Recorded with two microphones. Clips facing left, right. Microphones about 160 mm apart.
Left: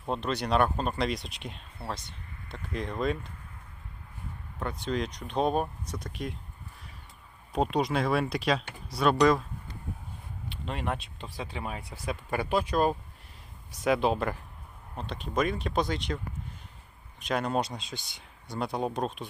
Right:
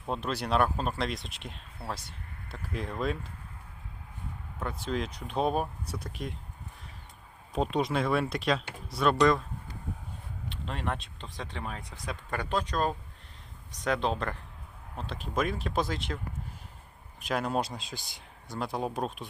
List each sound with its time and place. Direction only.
0.0 s speech: 5° right (ahead or behind)
4.6 s speech: 5° right (ahead or behind)
7.5 s speech: centre (ahead or behind)
10.5 s speech: 5° left (ahead or behind)